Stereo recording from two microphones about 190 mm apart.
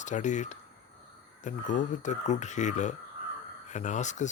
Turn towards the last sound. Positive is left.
turn(degrees=40)  # may be behind; listen again after turning